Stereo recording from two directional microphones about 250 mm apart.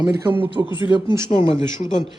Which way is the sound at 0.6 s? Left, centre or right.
Centre.